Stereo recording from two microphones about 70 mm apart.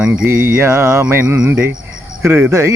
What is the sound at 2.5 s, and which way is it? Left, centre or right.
Music, right.